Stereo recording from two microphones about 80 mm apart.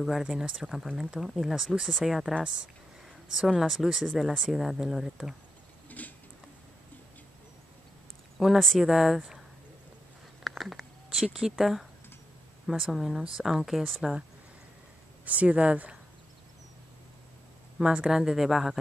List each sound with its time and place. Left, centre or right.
0.0 s speech: centre
3.3 s speech: centre
5.9 s a sound: left
8.4 s speech: centre
10.4 s a sound: centre
12.9 s speech: centre
15.2 s speech: centre
17.7 s speech: centre